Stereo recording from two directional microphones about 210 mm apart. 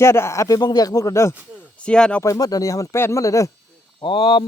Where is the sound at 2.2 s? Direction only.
15° left (ahead or behind).